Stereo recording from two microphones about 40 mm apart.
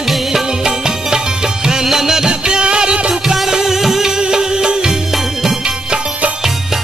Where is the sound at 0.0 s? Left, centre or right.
Centre.